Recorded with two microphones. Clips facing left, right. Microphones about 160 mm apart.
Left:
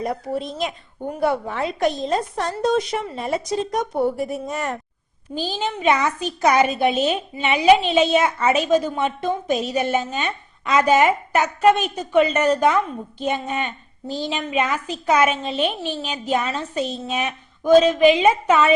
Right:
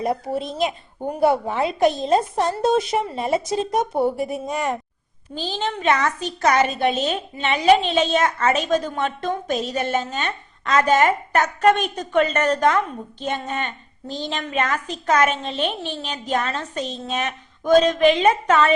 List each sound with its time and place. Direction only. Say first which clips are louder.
0.0 s a woman's voice: right 1 dB; 25° right (ahead or behind)
5.3 s a child's voice: left 1 dB; 10° left (ahead or behind)